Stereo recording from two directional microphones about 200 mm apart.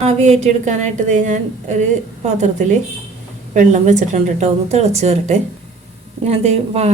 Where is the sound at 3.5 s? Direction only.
35° right (ahead or behind).